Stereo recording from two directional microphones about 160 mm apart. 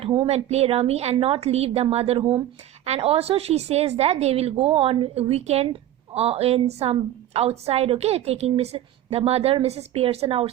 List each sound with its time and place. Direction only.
0.3 s a woman's voice: 40° right (ahead or behind)